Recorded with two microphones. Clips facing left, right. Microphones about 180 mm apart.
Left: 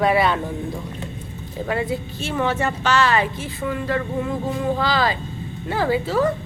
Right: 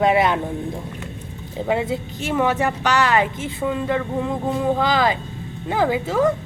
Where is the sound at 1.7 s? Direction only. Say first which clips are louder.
Right 2 dB; 20° right (ahead or behind).